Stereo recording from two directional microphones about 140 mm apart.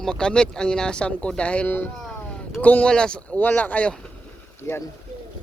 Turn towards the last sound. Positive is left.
turn(degrees=15)  # may be behind; listen again after turning